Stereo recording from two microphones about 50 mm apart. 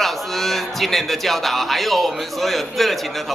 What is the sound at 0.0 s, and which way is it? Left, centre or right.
A man's voice, centre.